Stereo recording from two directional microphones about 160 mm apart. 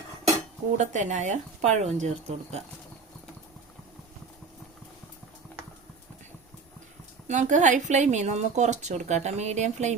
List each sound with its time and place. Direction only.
0.8 s speech: 50° right (ahead or behind)
7.3 s speech: 50° right (ahead or behind)